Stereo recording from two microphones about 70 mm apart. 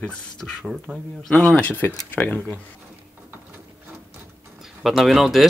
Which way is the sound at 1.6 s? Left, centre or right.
Left.